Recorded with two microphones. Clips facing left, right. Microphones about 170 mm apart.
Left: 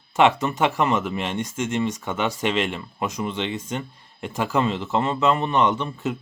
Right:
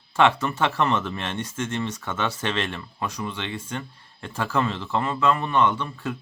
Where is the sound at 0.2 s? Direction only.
15° left (ahead or behind).